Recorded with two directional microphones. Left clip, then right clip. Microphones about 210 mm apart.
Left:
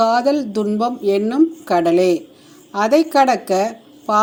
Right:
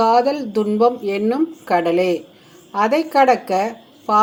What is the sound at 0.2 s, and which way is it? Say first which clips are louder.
Speech: even; 25° left (ahead or behind).